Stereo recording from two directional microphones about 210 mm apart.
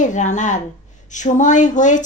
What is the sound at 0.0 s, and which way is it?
Speech, 35° left (ahead or behind).